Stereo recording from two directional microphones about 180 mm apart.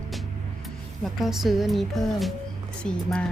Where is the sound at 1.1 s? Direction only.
Centre (ahead or behind).